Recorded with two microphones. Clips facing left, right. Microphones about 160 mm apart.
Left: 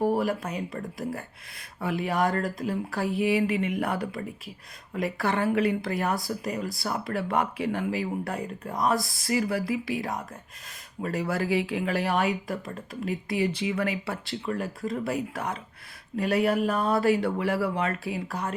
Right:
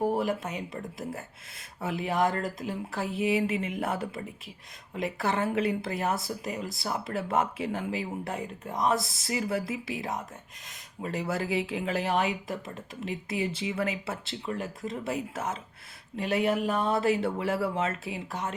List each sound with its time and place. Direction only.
0.7 s speech: 20° right (ahead or behind)